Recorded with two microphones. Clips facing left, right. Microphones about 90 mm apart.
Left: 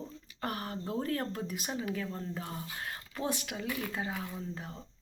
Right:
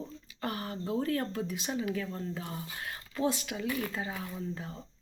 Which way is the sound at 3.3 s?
50° left (ahead or behind).